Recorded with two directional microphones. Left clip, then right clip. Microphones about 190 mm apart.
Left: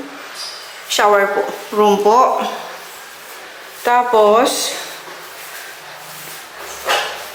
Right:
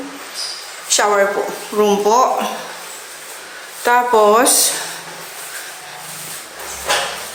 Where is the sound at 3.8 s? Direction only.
5° right (ahead or behind).